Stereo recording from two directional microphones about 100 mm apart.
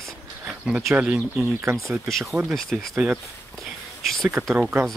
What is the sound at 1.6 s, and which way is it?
Speech, 30° right (ahead or behind).